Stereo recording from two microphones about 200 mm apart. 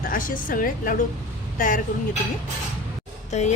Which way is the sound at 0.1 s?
45° left (ahead or behind).